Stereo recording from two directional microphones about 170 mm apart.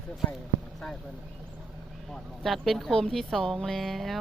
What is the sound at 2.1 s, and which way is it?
Speech, centre (ahead or behind).